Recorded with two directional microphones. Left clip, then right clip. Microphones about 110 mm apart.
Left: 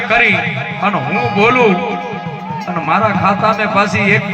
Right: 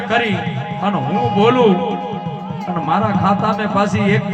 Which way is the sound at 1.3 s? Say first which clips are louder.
Left 2 dB; 55° right (ahead or behind).